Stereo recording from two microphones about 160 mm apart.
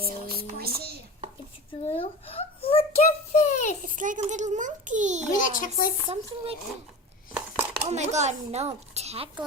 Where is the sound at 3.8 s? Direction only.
55° right (ahead or behind).